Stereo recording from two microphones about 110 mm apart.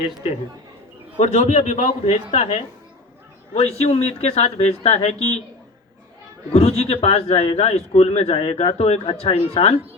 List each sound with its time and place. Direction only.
1.2 s a man's voice: 90° left
6.5 s a man's voice: 75° left (ahead or behind)